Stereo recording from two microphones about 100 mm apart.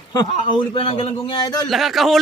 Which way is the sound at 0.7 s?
70° left (ahead or behind).